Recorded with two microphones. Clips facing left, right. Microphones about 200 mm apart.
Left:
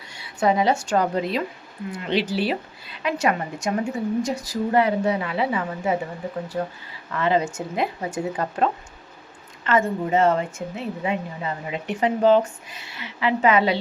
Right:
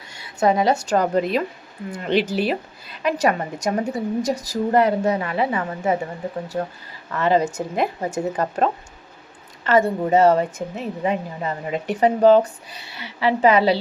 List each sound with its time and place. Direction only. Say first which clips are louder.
0.1 s a woman's voice: right 2 dB; 45° right (ahead or behind)
7.2 s speech: right 3 dB; 40° right (ahead or behind)